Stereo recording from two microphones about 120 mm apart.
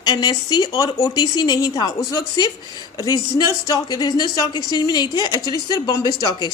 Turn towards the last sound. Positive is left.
turn(degrees=35)  # may be behind; listen again after turning